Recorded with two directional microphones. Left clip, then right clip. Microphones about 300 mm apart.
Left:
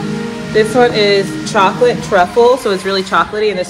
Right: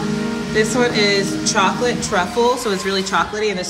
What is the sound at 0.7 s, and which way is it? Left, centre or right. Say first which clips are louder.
Speech: left 7 dB; centre.